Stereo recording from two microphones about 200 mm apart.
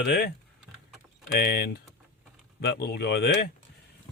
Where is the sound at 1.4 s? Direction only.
55° left (ahead or behind).